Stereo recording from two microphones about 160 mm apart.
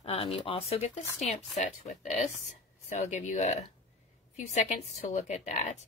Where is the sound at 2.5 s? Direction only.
45° left (ahead or behind).